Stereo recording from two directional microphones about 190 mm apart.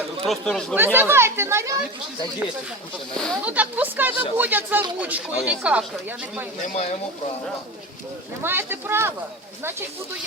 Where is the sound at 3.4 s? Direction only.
10° right (ahead or behind).